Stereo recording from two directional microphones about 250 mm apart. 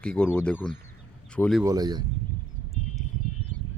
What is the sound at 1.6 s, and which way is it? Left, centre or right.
Speech, centre.